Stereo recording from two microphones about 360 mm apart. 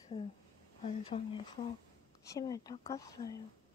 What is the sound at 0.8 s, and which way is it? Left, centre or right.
Speech, centre.